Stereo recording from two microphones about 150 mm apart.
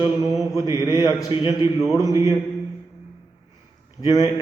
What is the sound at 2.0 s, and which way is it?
Speech, 25° right (ahead or behind).